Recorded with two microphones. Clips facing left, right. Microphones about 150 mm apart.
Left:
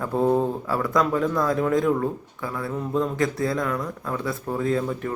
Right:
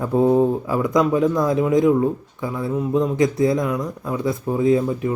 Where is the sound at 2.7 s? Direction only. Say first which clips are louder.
Right 7 dB; 5° right (ahead or behind).